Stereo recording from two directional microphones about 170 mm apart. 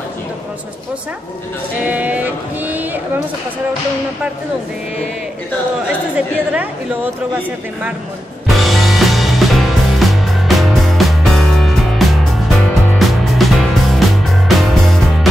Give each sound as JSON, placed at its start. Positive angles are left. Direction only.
{"t": 1.9, "sound": "speech", "side_deg": -10}
{"t": 6.1, "sound": "a woman's voice", "side_deg": -5}
{"t": 8.5, "sound": "music", "side_deg": 0}